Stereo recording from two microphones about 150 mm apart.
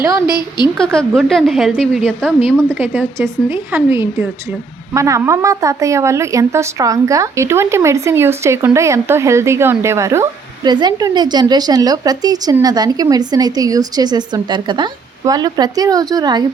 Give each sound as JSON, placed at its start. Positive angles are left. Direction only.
{"t": 0.3, "sound": "a woman's voice", "side_deg": 30}
{"t": 0.8, "sound": "a woman's voice", "side_deg": 5}
{"t": 2.7, "sound": "a woman's voice", "side_deg": -15}